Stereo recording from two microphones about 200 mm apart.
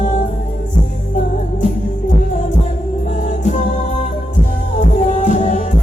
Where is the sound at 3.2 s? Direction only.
40° left (ahead or behind).